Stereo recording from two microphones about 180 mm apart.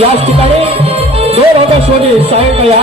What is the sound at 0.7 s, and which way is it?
Music, 35° right (ahead or behind).